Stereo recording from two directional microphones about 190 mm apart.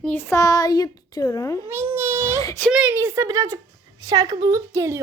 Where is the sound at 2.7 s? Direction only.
5° right (ahead or behind).